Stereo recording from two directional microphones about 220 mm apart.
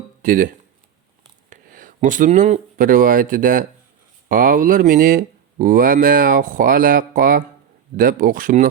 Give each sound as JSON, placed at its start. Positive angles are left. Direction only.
{"t": 0.2, "sound": "speech", "side_deg": -40}